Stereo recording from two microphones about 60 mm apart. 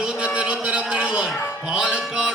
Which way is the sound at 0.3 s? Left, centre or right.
Centre.